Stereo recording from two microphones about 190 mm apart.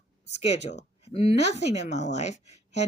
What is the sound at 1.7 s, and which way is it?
Speech, 35° left (ahead or behind).